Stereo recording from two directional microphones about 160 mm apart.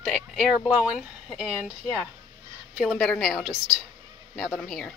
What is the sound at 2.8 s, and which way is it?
Speech, centre (ahead or behind).